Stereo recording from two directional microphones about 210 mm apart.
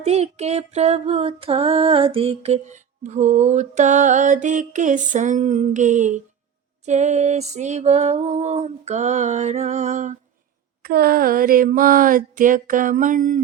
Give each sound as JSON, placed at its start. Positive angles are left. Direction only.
{"t": 0.0, "sound": "female singing", "side_deg": -30}
{"t": 10.8, "sound": "female singing", "side_deg": -45}